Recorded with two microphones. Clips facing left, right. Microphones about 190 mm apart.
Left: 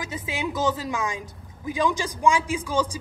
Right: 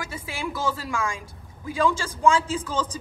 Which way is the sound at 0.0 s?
20° left (ahead or behind).